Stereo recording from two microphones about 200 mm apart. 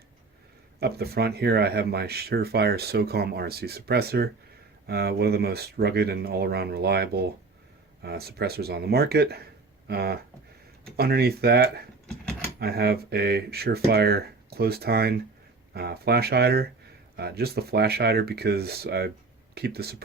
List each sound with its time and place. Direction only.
0.8 s speech: 50° right (ahead or behind)